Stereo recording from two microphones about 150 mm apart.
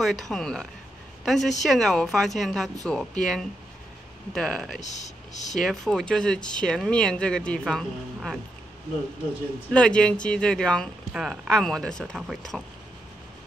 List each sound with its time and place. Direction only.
0.0 s speech: centre (ahead or behind)
4.7 s speech: 50° left (ahead or behind)
5.6 s speech: centre (ahead or behind)
9.7 s speech: 5° left (ahead or behind)